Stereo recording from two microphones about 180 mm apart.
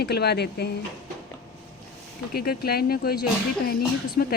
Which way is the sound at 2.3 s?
55° left (ahead or behind).